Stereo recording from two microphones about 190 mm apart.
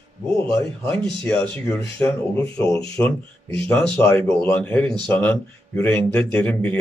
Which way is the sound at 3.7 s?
5° left (ahead or behind).